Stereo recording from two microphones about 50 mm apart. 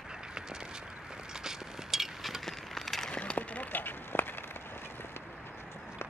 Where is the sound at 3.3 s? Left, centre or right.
Left.